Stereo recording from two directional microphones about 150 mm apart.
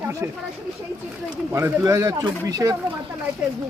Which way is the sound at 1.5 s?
20° right (ahead or behind).